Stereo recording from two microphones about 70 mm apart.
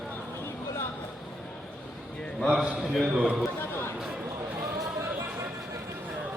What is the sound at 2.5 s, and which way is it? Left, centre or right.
Speech, centre.